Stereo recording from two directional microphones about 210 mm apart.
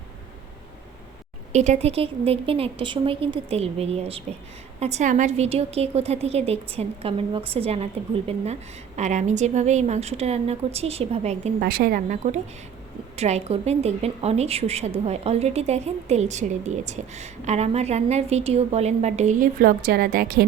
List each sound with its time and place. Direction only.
1.5 s a woman's voice: 35° right (ahead or behind)
9.0 s speech: 35° right (ahead or behind)
11.6 s speech: 45° right (ahead or behind)